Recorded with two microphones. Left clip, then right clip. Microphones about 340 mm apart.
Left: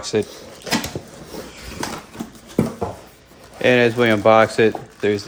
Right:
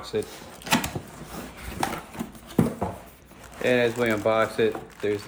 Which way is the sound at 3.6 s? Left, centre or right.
Left.